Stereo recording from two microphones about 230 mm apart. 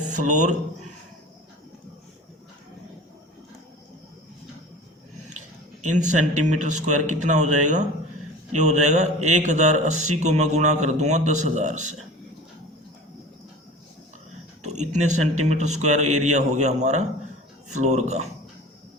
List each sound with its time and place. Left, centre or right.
0.1 s speech: right
6.1 s a man's voice: right
14.6 s a man's voice: right